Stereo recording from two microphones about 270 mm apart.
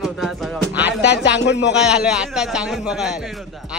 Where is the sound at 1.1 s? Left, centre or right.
Left.